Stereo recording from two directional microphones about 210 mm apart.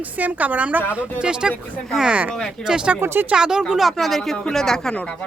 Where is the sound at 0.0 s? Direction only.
5° right (ahead or behind).